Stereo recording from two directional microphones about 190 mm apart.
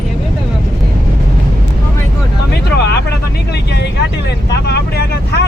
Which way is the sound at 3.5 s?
60° left (ahead or behind).